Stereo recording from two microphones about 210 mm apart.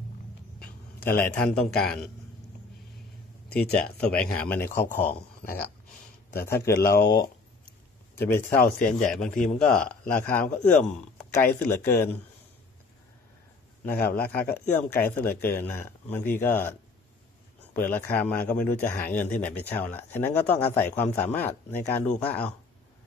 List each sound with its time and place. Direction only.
0.6 s a man's voice: 5° left (ahead or behind)
4.1 s speech: 5° left (ahead or behind)
4.7 s a man's voice: 40° left (ahead or behind)
8.2 s speech: 10° left (ahead or behind)
9.3 s speech: 35° left (ahead or behind)
9.8 s speech: 5° left (ahead or behind)
13.8 s speech: 10° left (ahead or behind)
17.7 s speech: 10° left (ahead or behind)